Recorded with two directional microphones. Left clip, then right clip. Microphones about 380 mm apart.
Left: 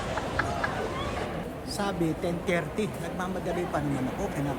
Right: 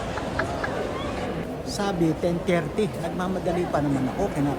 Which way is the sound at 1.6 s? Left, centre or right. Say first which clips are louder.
Right 5 dB; centre.